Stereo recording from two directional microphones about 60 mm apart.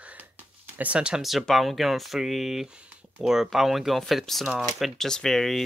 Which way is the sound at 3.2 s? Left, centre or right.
Centre.